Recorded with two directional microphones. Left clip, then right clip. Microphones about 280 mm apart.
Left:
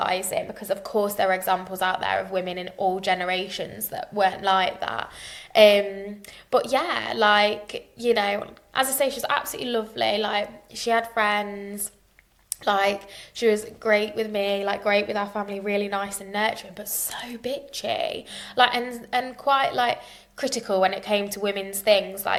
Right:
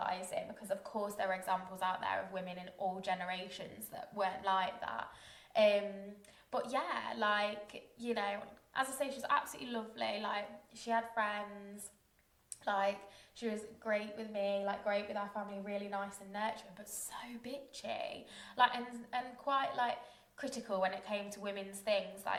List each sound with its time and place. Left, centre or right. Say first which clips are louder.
0.0 s a woman's voice: left 14 dB; left
12.6 s a woman's voice: left 13 dB; left